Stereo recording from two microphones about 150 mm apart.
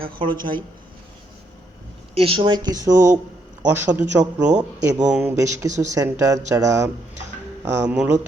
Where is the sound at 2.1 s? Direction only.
40° right (ahead or behind); by 4.0 s 15° right (ahead or behind).